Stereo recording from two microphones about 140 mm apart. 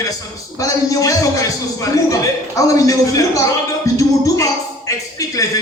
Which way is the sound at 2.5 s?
25° left (ahead or behind).